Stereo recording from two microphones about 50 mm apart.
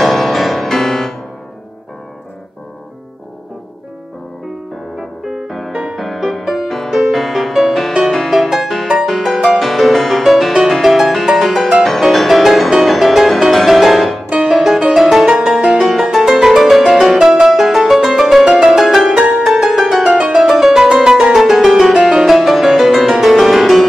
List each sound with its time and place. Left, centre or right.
0.0 s music: centre
5.2 s music: centre
5.7 s music: centre
5.9 s music: centre
19.3 s music: centre